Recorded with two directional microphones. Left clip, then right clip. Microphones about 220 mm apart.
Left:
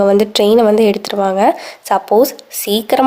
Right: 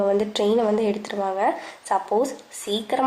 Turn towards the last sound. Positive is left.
turn(degrees=45)  # may be behind; listen again after turning